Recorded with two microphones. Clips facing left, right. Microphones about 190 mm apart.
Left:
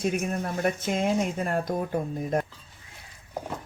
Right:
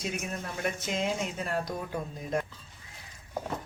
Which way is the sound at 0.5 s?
50° left (ahead or behind).